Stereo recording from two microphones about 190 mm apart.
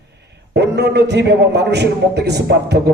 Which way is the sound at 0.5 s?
65° right (ahead or behind).